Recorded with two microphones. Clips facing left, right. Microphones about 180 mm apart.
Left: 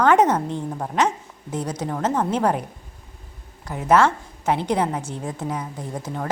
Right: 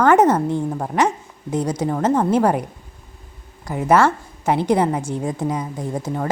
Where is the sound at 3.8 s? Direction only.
10° right (ahead or behind).